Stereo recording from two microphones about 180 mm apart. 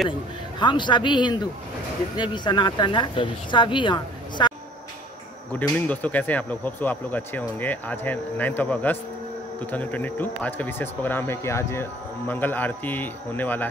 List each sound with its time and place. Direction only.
0.6 s speech: 25° left (ahead or behind)
5.5 s speech: 10° left (ahead or behind)